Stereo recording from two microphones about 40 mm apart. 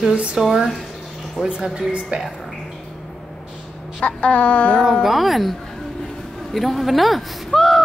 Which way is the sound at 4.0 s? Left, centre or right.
Left.